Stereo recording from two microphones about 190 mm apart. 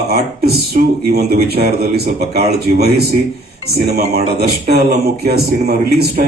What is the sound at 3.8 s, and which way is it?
Speech, 55° right (ahead or behind).